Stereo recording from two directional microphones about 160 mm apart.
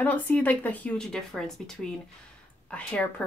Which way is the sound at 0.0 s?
10° left (ahead or behind).